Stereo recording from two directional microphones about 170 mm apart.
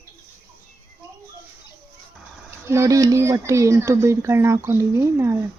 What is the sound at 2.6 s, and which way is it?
Speech, 15° right (ahead or behind).